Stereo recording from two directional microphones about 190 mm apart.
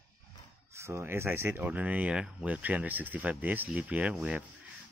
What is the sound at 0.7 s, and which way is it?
Speech, 15° right (ahead or behind).